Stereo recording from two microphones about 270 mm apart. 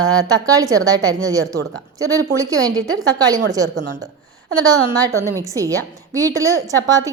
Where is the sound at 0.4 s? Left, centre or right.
Centre.